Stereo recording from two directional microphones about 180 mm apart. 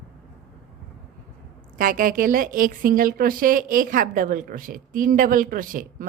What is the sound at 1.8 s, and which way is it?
A woman's voice, 50° right (ahead or behind).